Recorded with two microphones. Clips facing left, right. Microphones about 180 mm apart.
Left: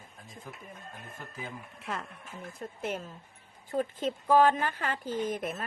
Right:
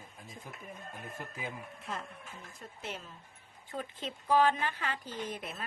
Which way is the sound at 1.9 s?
70° left (ahead or behind).